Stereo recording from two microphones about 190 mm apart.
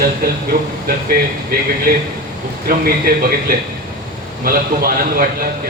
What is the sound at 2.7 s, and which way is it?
Speech, 50° right (ahead or behind).